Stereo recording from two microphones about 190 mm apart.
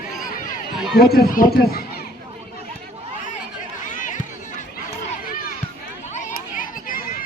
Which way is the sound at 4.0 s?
45° left (ahead or behind).